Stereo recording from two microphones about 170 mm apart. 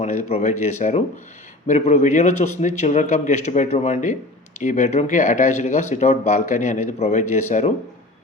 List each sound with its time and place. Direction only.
0.0 s speech: 45° left (ahead or behind)